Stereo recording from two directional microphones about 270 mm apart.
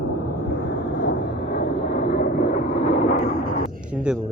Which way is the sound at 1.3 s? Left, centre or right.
Right.